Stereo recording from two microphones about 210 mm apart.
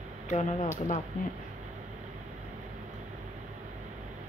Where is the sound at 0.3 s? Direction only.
35° left (ahead or behind).